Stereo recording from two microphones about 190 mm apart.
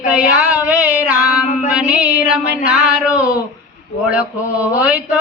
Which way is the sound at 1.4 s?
40° left (ahead or behind).